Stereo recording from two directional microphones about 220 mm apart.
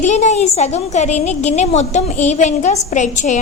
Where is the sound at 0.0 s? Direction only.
30° left (ahead or behind).